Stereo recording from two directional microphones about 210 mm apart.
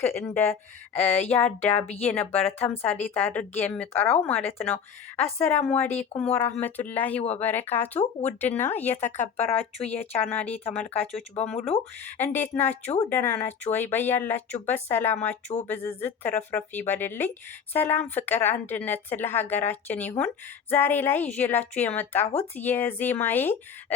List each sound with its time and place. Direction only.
0.0 s a woman's voice: 10° left (ahead or behind)
9.0 s speech: 35° left (ahead or behind)
9.8 s a woman's voice: 10° left (ahead or behind)